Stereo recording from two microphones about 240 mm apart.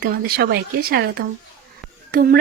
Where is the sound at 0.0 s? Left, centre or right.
Right.